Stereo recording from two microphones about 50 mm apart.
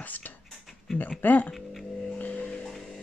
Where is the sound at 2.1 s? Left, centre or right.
Left.